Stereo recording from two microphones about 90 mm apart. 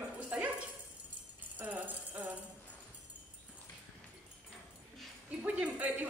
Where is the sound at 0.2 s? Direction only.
15° right (ahead or behind).